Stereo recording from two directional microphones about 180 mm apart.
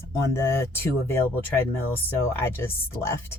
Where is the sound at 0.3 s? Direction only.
15° left (ahead or behind).